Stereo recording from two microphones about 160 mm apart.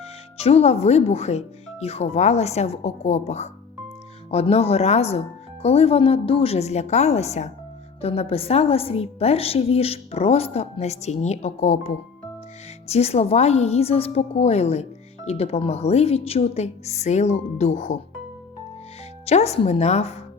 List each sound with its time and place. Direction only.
0.0 s a woman's voice: 40° left (ahead or behind)
12.9 s a woman's voice: 40° left (ahead or behind)
19.2 s speech: 40° left (ahead or behind)